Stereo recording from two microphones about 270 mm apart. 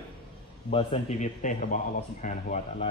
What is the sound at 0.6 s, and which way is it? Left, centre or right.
Speech, left.